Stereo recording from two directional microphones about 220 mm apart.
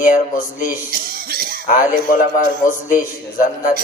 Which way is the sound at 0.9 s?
40° right (ahead or behind).